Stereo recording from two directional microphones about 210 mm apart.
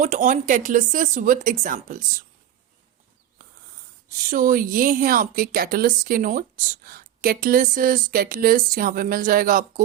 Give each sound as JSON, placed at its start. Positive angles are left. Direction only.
{"t": 0.0, "sound": "a woman's voice", "side_deg": -35}
{"t": 4.1, "sound": "a woman's voice", "side_deg": -40}